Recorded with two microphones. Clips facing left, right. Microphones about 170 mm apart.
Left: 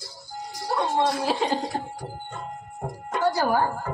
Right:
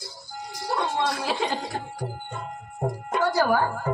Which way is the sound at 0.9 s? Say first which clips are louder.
Left 3 dB; 35° left (ahead or behind).